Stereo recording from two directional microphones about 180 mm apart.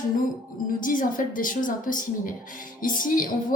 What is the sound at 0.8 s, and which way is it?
A woman's voice, 50° left (ahead or behind).